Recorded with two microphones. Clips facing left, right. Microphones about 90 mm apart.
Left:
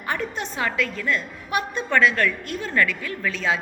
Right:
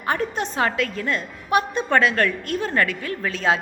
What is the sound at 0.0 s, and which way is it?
Speech, 40° right (ahead or behind).